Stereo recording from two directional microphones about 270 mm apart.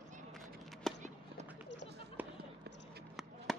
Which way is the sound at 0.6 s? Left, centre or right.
Centre.